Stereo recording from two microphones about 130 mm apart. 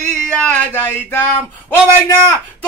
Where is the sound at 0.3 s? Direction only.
10° left (ahead or behind).